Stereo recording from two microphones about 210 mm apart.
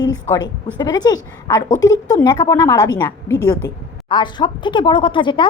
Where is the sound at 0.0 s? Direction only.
20° left (ahead or behind).